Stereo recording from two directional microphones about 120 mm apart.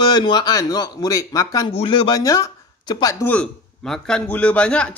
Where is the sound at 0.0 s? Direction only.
40° left (ahead or behind).